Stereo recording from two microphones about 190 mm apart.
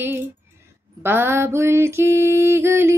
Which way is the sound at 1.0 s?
10° right (ahead or behind).